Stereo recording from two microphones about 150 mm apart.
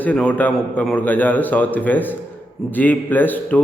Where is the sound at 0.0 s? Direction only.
10° left (ahead or behind).